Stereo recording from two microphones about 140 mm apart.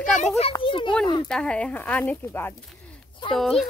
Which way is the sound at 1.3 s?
5° left (ahead or behind).